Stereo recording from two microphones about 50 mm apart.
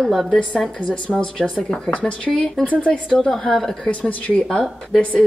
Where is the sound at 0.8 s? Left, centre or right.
Left.